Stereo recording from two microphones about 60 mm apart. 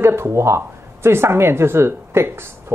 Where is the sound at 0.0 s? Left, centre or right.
Right.